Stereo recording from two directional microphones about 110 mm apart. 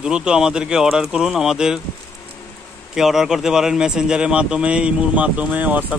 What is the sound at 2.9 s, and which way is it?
A man's voice, 5° right (ahead or behind).